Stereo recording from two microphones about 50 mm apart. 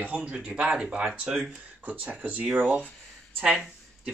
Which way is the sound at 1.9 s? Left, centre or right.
Right.